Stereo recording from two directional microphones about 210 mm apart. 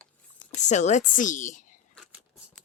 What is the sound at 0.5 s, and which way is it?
A woman's voice, 35° left (ahead or behind).